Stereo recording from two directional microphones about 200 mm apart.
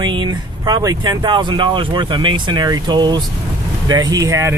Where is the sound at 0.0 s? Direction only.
25° right (ahead or behind).